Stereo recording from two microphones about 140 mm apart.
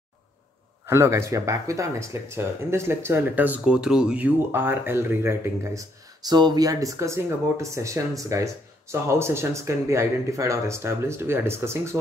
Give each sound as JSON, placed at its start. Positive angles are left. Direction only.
{"t": 0.8, "sound": "speech", "side_deg": -20}